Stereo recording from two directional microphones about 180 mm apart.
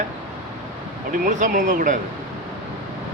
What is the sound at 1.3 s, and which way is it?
Speech, 45° right (ahead or behind).